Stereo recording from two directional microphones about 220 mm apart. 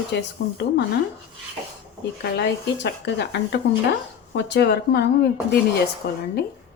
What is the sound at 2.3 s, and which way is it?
Speech, 50° left (ahead or behind).